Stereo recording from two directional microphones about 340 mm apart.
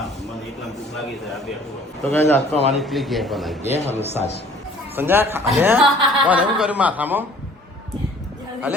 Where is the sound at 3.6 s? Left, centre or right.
Centre.